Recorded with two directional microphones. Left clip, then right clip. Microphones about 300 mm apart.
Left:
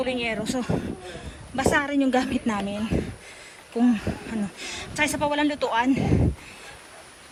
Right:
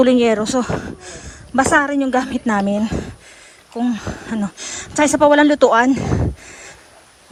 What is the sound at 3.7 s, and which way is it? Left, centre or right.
Speech, centre.